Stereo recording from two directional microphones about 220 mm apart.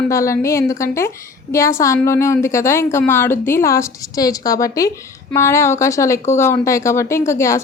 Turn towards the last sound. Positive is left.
turn(degrees=15)  # may be behind; listen again after turning